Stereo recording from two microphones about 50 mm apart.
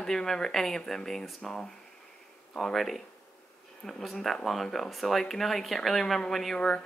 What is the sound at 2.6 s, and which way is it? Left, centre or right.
Speech, centre.